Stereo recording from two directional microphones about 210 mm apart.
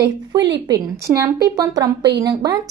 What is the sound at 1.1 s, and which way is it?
A woman's voice, 15° right (ahead or behind).